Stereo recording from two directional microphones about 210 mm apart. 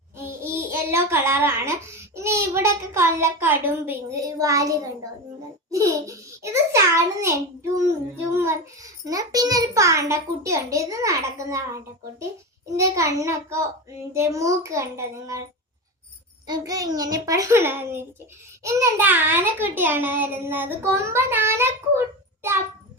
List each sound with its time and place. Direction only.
0.2 s a child's voice: 10° right (ahead or behind)
5.7 s a child's voice: 15° right (ahead or behind)
16.5 s a child's voice: 15° right (ahead or behind)